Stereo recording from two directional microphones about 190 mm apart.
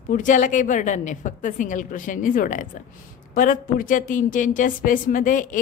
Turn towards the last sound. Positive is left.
turn(degrees=45)  # may be behind; listen again after turning